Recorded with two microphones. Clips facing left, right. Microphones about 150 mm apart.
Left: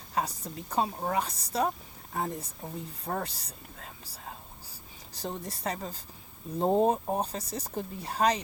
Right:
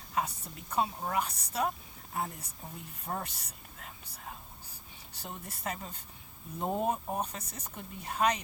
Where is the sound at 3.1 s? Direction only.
50° left (ahead or behind).